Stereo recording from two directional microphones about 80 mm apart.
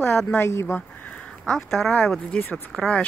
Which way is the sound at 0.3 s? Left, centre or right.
Left.